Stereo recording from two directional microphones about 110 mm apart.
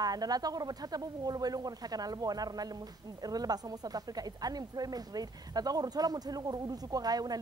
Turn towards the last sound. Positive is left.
turn(degrees=-35)  # may be behind; listen again after turning